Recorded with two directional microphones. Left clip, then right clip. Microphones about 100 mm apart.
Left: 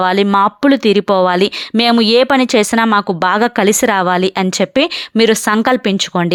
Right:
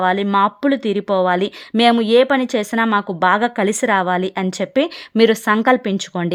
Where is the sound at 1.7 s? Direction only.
30° left (ahead or behind).